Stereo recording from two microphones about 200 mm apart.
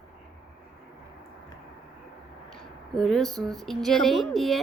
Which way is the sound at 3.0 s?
Centre (ahead or behind).